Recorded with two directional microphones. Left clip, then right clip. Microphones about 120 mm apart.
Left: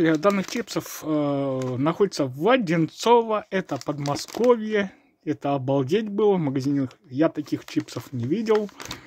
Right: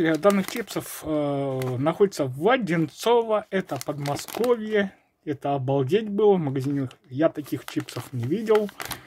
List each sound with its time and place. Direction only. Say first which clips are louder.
0.0 s speech: even; 35° left (ahead or behind)